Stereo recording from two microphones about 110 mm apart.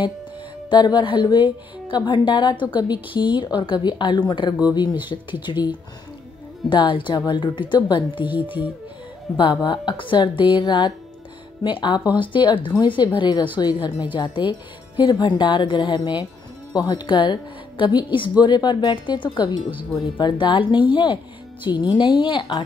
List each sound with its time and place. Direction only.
0.7 s a woman's voice: 45° left (ahead or behind)
8.2 s speech: 15° right (ahead or behind)
9.4 s a woman's voice: 45° left (ahead or behind)